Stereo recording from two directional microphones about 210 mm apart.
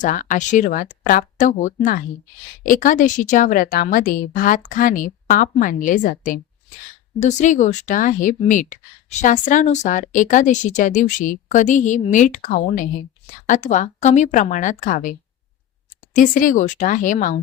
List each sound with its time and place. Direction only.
0.0 s speech: 40° left (ahead or behind)
16.1 s speech: 40° left (ahead or behind)